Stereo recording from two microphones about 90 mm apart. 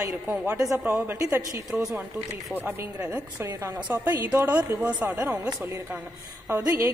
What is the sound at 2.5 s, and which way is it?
A woman's voice, 20° right (ahead or behind).